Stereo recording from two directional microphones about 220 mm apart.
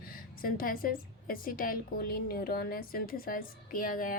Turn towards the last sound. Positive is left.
turn(degrees=40)  # may be behind; listen again after turning